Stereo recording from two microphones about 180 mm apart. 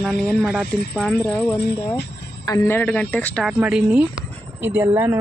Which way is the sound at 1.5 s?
65° left (ahead or behind).